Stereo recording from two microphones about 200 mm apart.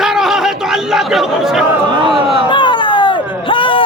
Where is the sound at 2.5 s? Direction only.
25° left (ahead or behind).